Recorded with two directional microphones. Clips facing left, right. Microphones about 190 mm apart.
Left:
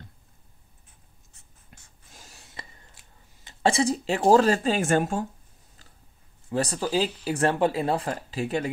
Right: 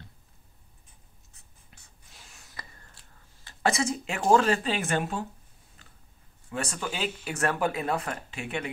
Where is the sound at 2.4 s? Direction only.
20° left (ahead or behind); by 5.2 s 45° left (ahead or behind).